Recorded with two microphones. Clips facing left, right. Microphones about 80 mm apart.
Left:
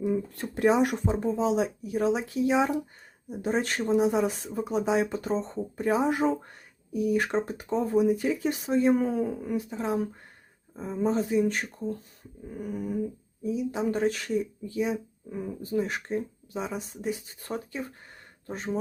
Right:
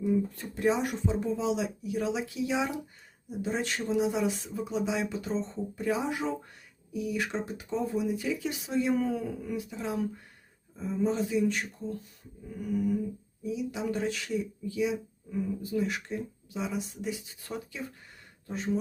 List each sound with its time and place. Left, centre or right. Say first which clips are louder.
0.3 s speech: left 4 dB; left